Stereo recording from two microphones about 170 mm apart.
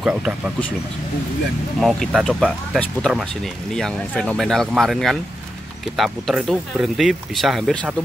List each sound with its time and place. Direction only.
0.0 s speech: 5° right (ahead or behind)
1.8 s speech: centre (ahead or behind)